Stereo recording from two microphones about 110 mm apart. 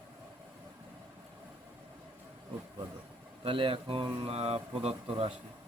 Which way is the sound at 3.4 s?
55° right (ahead or behind).